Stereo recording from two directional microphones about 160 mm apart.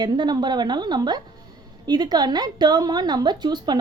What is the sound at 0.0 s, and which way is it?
A woman's voice, 25° right (ahead or behind).